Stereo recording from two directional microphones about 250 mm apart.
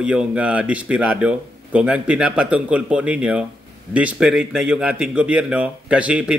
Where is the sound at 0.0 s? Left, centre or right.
Centre.